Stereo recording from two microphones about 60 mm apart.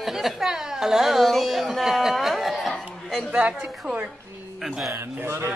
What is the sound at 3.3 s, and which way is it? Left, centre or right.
Speech, centre.